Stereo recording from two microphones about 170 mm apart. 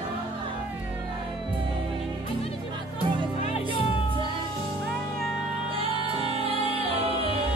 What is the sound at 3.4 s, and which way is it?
Music, 35° left (ahead or behind).